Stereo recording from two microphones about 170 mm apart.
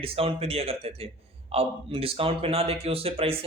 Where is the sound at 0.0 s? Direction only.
35° right (ahead or behind).